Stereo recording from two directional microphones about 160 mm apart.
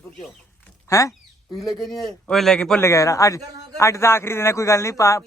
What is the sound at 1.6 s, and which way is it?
A man's voice, centre (ahead or behind).